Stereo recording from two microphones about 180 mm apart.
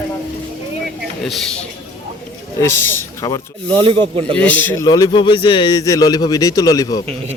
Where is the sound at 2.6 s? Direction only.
15° left (ahead or behind).